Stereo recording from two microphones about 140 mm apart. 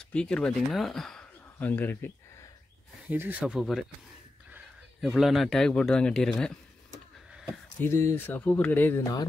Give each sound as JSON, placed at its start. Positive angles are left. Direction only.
{"t": 0.0, "sound": "speech", "side_deg": 5}
{"t": 3.1, "sound": "speech", "side_deg": -10}
{"t": 5.0, "sound": "a man's voice", "side_deg": 0}
{"t": 7.8, "sound": "speech", "side_deg": 20}
{"t": 9.0, "sound": "speech", "side_deg": 30}